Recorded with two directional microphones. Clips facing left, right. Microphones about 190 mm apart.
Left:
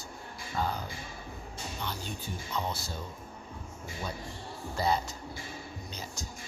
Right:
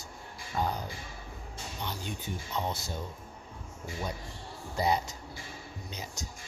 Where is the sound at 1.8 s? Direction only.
20° right (ahead or behind).